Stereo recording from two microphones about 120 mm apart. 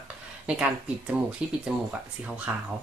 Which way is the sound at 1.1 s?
10° right (ahead or behind).